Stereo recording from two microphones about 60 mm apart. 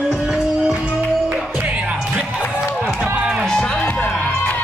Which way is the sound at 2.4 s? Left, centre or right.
Left.